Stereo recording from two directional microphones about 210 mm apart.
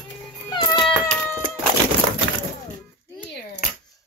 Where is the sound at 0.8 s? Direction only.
10° left (ahead or behind).